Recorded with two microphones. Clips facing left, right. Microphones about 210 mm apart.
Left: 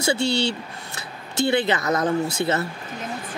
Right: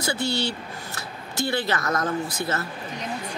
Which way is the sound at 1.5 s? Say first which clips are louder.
Left 4 dB; 20° left (ahead or behind).